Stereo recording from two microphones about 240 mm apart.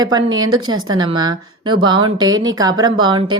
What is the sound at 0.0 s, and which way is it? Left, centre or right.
Speech, centre.